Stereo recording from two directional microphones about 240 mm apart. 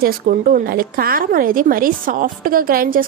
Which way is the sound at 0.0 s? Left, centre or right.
Right.